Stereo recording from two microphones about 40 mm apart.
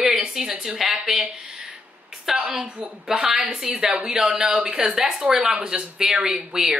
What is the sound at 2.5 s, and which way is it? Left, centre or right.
Speech, centre.